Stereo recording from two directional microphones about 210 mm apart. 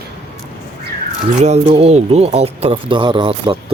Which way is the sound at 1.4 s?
30° right (ahead or behind).